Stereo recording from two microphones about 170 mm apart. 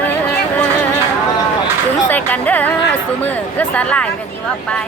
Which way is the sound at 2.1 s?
10° left (ahead or behind).